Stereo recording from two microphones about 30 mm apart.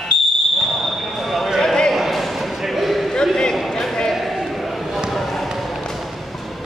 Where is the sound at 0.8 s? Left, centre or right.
Centre.